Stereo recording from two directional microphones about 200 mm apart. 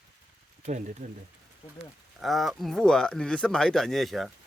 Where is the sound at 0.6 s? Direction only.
35° right (ahead or behind).